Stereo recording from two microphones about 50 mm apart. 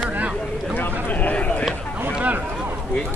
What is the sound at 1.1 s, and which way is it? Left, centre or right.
Run, left.